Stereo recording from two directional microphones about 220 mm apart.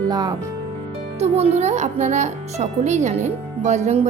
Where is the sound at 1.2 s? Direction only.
30° right (ahead or behind).